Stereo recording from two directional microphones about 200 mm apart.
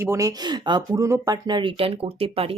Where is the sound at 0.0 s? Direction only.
15° right (ahead or behind).